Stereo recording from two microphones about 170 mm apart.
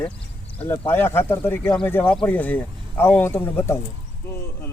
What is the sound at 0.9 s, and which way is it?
Speech, 10° left (ahead or behind).